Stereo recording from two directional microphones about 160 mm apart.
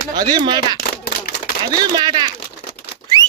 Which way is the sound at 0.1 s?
25° right (ahead or behind).